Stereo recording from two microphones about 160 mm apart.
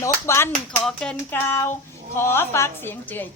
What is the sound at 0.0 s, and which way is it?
Speech, 15° left (ahead or behind).